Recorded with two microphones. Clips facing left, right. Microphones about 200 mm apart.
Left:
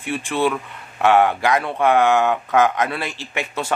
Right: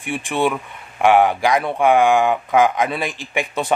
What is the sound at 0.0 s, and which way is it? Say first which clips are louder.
Speech: right 1 dB; 15° right (ahead or behind).